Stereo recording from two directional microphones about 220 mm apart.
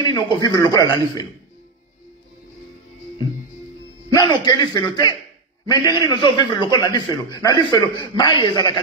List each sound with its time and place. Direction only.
0.0 s speech: 20° left (ahead or behind)
4.1 s a man's voice: 20° left (ahead or behind)